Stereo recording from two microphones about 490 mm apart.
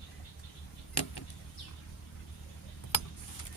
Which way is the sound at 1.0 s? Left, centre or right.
Left.